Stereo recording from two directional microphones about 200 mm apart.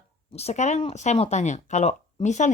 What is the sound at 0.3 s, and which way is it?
A woman's voice, 35° left (ahead or behind).